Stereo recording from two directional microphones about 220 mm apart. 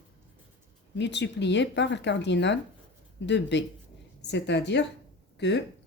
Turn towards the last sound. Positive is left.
turn(degrees=50)  # may be behind; listen again after turning